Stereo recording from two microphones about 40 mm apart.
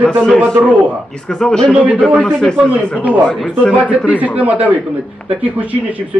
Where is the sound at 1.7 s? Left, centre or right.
Right.